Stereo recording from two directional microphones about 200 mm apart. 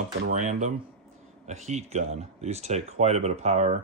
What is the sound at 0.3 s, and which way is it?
Speech, 35° right (ahead or behind).